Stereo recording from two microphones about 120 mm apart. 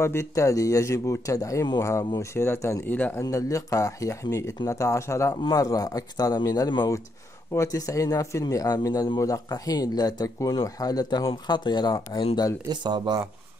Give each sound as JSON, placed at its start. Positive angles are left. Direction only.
{"t": 0.0, "sound": "a man's voice", "side_deg": 25}
{"t": 12.6, "sound": "speech", "side_deg": -35}